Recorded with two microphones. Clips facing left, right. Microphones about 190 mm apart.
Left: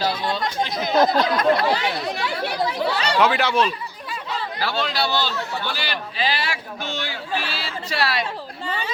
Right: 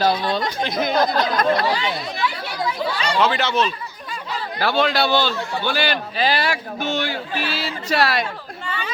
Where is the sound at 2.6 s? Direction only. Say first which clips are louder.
Right 1 dB; 40° left (ahead or behind).